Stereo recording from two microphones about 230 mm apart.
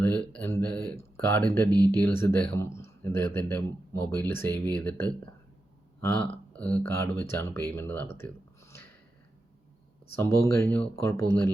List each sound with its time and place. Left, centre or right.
0.0 s speech: centre
1.7 s speech: centre
2.0 s speech: centre
10.2 s speech: centre